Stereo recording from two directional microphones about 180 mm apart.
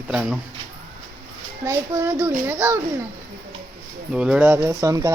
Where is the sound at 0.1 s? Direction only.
5° right (ahead or behind).